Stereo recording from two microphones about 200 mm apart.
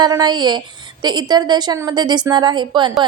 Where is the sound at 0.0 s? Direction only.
20° right (ahead or behind).